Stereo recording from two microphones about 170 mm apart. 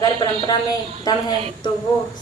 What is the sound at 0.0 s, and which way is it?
Speech, 25° left (ahead or behind).